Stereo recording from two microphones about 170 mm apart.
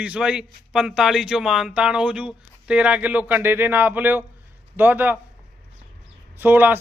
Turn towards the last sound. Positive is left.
turn(degrees=-10)  # may be behind; listen again after turning